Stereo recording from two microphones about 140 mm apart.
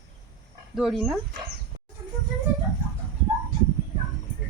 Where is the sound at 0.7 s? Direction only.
Centre (ahead or behind).